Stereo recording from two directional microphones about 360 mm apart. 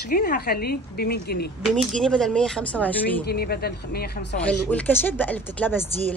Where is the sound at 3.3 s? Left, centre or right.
Left.